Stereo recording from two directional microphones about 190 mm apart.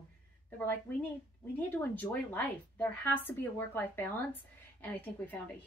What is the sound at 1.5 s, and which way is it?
A woman's voice, 10° left (ahead or behind).